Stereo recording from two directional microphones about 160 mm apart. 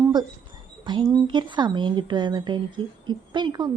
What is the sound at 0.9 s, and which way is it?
Speech, 30° right (ahead or behind).